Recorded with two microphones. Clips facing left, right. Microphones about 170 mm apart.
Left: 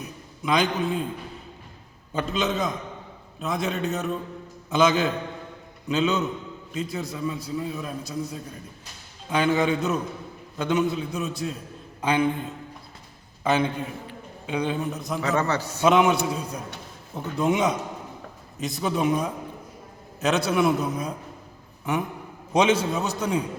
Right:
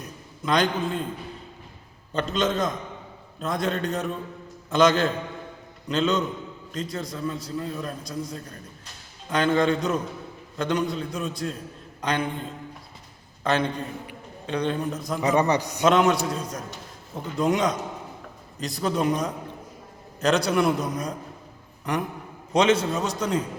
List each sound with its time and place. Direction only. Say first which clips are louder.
0.0 s a sound: left 1 dB; 5° left (ahead or behind)
2.1 s a man's voice: right 1 dB; 5° left (ahead or behind)
13.4 s a man's voice: left 1 dB; 5° left (ahead or behind)
15.2 s a man's voice: right 4 dB; 15° right (ahead or behind)
15.8 s a man's voice: left 1 dB; 5° left (ahead or behind)
22.5 s a man's voice: even; 10° left (ahead or behind)